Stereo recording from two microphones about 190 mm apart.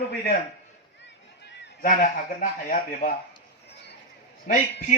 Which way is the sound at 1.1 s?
65° left (ahead or behind).